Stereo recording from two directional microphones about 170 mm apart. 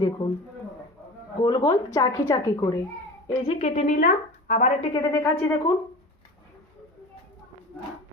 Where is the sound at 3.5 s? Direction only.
40° left (ahead or behind).